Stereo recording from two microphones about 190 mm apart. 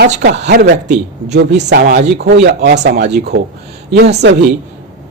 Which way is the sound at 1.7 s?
55° right (ahead or behind).